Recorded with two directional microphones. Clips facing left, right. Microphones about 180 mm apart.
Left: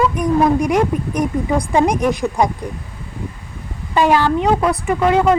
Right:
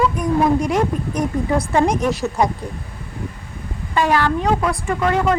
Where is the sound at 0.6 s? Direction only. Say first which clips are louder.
Left 3 dB; 10° left (ahead or behind).